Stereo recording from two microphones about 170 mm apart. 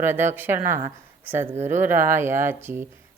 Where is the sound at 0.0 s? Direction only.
15° right (ahead or behind).